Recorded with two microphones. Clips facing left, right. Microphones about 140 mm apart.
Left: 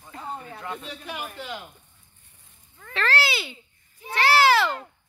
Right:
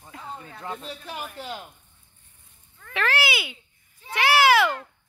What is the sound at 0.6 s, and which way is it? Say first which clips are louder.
Speech: right 3 dB; 35° right (ahead or behind).